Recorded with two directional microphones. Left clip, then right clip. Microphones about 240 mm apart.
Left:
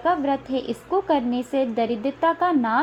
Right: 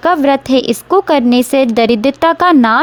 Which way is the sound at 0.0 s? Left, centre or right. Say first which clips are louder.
Right 11 dB; right.